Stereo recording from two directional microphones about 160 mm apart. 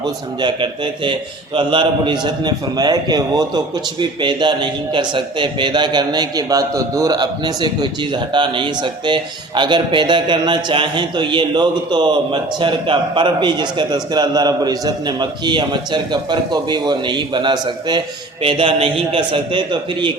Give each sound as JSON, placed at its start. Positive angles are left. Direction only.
{"t": 0.0, "sound": "a man's voice", "side_deg": -30}